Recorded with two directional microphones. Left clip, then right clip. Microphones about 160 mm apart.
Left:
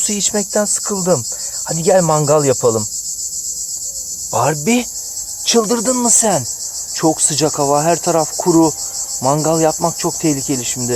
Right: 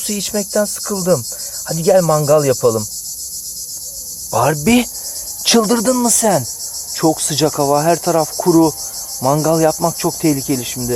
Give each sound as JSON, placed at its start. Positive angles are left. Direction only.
{"t": 0.1, "sound": "cricket", "side_deg": 5}
{"t": 4.3, "sound": "cricket", "side_deg": -10}
{"t": 4.6, "sound": "insect", "side_deg": -20}
{"t": 5.5, "sound": "speech", "side_deg": -20}
{"t": 6.9, "sound": "cricket", "side_deg": -5}